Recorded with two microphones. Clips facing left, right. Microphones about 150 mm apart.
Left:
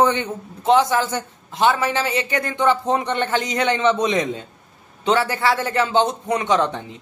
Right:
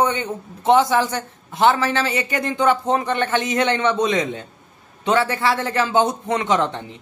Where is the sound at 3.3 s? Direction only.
25° right (ahead or behind).